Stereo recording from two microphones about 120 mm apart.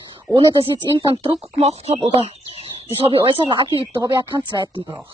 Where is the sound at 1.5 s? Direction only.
60° right (ahead or behind).